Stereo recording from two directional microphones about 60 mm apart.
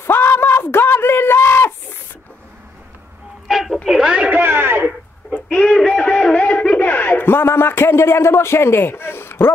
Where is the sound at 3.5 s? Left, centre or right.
Centre.